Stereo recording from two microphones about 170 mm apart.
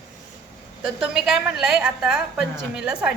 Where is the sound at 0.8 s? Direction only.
5° right (ahead or behind).